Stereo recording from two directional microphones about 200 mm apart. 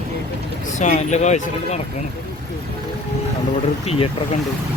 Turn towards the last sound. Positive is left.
turn(degrees=30)  # may be behind; listen again after turning